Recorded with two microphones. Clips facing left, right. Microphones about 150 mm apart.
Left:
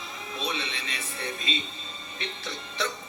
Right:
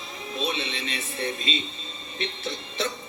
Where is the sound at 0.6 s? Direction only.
25° right (ahead or behind).